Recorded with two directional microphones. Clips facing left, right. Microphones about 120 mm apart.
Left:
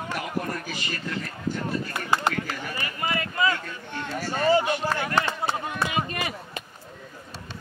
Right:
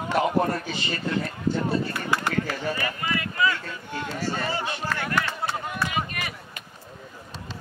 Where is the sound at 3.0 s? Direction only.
30° left (ahead or behind).